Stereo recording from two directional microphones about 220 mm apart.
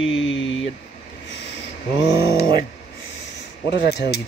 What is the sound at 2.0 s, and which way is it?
Speech, 25° right (ahead or behind).